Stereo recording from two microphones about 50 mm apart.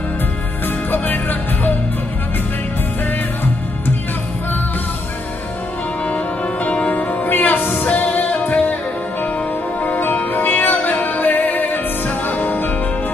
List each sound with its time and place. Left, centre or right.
0.9 s music: left
6.0 s music: left
9.8 s music: left